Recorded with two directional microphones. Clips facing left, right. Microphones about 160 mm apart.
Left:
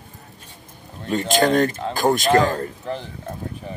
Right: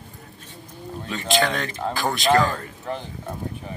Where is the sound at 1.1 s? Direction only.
45° left (ahead or behind).